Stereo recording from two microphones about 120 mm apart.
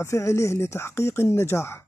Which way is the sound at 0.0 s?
25° left (ahead or behind).